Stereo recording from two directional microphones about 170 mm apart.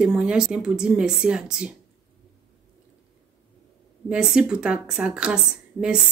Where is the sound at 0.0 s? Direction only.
5° right (ahead or behind).